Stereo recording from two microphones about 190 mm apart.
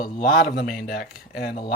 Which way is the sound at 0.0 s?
50° left (ahead or behind).